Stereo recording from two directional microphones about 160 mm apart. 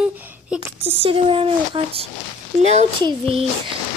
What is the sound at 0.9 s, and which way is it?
Speech, 35° right (ahead or behind).